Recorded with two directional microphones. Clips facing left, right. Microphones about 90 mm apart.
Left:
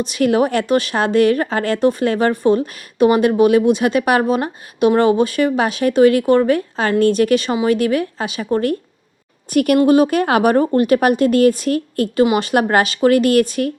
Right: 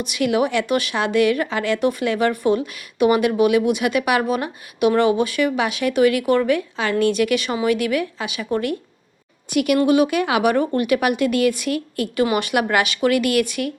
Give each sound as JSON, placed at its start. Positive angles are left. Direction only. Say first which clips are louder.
{"t": 0.0, "sound": "a woman's voice", "louder": "left 4 dB", "side_deg": 35}
{"t": 12.2, "sound": "a woman's voice", "louder": "left 4 dB", "side_deg": 25}
{"t": 12.5, "sound": "a woman's voice", "louder": "left 4 dB", "side_deg": 35}